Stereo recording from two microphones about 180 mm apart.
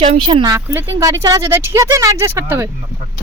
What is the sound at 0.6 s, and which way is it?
Speech, 10° right (ahead or behind).